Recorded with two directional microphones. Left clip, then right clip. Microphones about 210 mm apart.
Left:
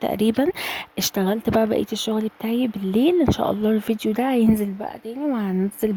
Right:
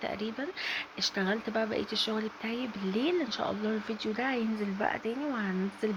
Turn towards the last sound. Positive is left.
turn(degrees=40)  # may be behind; listen again after turning